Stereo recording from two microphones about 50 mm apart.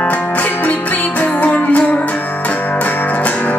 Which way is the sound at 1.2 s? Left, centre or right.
Left.